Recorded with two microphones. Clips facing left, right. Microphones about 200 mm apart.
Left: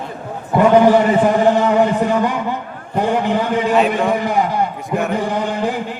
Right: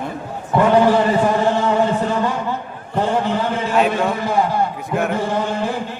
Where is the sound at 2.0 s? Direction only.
15° left (ahead or behind).